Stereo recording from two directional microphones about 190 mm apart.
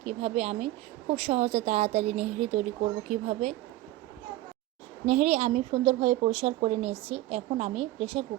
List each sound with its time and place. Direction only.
0.0 s a woman's voice: 35° right (ahead or behind)
5.0 s a woman's voice: 40° right (ahead or behind)